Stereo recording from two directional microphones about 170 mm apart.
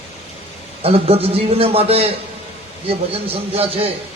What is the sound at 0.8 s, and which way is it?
A man's voice, 35° right (ahead or behind).